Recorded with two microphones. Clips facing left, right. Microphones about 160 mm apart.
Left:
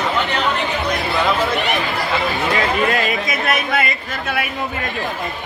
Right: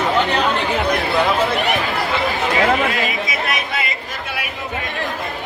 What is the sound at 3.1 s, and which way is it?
Chatter, 50° left (ahead or behind).